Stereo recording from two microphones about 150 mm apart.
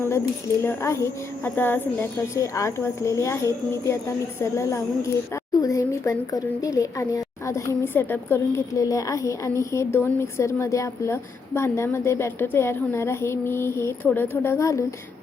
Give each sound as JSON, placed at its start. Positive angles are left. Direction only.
{"t": 0.6, "sound": "a woman's voice", "side_deg": 20}